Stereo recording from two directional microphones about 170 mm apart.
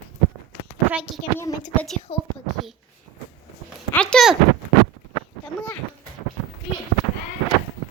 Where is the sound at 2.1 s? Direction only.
35° left (ahead or behind).